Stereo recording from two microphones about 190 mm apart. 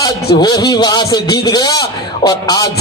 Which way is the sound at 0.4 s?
20° left (ahead or behind).